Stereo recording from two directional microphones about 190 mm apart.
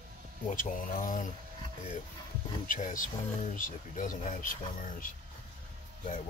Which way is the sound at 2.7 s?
45° left (ahead or behind).